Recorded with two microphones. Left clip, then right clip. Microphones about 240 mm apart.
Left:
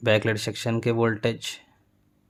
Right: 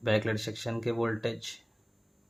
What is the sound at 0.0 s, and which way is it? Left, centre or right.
Speech, left.